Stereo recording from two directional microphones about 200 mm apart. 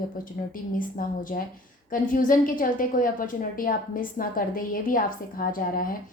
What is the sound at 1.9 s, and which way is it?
A woman's voice, 45° left (ahead or behind).